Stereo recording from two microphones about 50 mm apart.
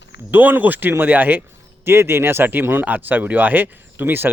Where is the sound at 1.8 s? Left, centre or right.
Right.